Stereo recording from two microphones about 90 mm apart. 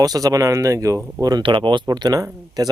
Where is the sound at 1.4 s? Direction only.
70° right (ahead or behind).